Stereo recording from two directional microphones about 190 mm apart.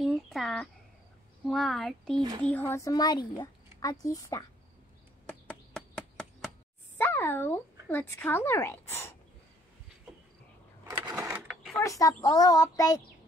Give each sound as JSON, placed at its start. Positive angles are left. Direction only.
{"t": 0.0, "sound": "a child's voice", "side_deg": 0}
{"t": 5.5, "sound": "chop", "side_deg": 5}
{"t": 7.0, "sound": "a sound", "side_deg": 10}
{"t": 7.9, "sound": "speech", "side_deg": 10}
{"t": 11.0, "sound": "sewing machine", "side_deg": -20}
{"t": 11.8, "sound": "speech", "side_deg": 15}